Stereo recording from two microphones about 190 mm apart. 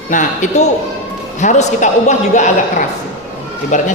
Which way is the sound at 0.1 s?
40° left (ahead or behind).